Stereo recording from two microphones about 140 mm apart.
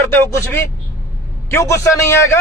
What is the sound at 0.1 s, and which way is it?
A man's voice, 15° left (ahead or behind).